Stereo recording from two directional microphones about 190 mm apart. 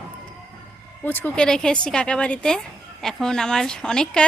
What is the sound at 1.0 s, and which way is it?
Speech, 10° left (ahead or behind).